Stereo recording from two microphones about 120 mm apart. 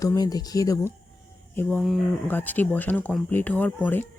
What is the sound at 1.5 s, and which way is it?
Speech, 10° left (ahead or behind).